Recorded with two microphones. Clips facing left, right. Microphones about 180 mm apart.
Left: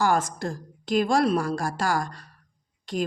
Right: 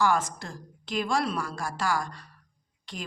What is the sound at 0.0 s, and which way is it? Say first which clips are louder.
A woman's voice: left 2 dB; 40° left (ahead or behind).